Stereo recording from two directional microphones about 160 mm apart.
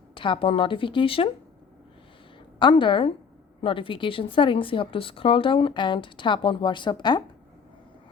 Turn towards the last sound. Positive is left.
turn(degrees=25)  # may be behind; listen again after turning